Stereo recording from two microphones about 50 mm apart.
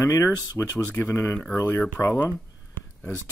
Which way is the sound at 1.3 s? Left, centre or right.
Left.